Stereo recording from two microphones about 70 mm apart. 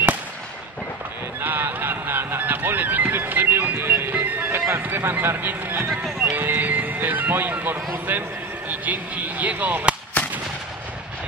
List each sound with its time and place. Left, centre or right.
1.4 s a sound: right
5.9 s music: centre
6.3 s speech: right